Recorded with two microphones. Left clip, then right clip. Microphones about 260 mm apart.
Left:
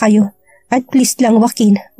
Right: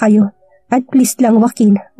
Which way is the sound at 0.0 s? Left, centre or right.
Left.